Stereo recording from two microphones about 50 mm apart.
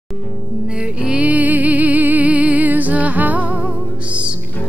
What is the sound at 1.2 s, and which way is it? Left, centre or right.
Music, right.